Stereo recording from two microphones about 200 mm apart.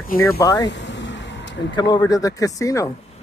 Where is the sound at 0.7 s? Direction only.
65° left (ahead or behind).